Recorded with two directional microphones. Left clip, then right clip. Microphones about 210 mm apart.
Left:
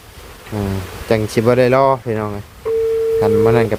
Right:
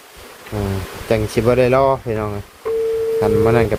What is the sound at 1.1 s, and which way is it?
Speech, 15° left (ahead or behind).